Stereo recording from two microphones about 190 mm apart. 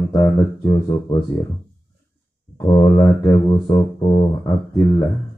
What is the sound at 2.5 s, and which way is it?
Mantra, 20° left (ahead or behind).